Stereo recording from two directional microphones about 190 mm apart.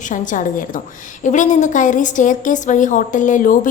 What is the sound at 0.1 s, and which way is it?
A woman's voice, 45° left (ahead or behind).